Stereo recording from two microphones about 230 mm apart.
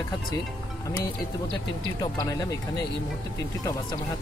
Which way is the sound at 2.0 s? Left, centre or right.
Centre.